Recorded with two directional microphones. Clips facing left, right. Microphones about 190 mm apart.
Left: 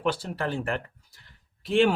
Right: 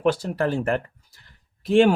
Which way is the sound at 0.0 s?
45° right (ahead or behind).